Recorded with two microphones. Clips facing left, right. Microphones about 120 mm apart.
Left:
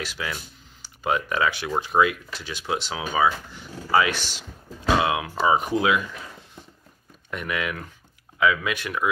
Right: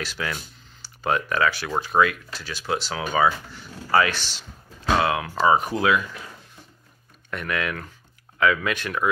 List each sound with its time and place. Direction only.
0.0 s speech: 10° left (ahead or behind)
7.2 s speech: 15° left (ahead or behind)